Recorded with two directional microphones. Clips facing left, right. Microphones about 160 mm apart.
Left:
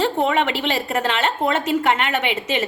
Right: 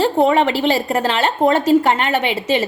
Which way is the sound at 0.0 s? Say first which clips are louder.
Right 5 dB; 35° right (ahead or behind).